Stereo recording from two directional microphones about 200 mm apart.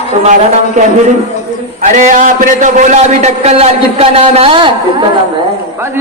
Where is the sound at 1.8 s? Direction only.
40° right (ahead or behind).